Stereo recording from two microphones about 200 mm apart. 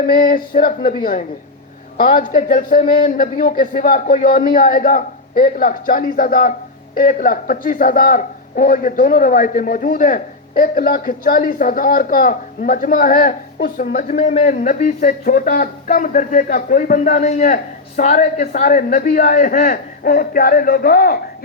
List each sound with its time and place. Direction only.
0.0 s a man's voice: 45° left (ahead or behind)
2.0 s a man's voice: 45° left (ahead or behind)